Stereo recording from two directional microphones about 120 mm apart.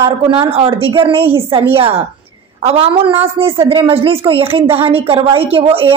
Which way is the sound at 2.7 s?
50° right (ahead or behind).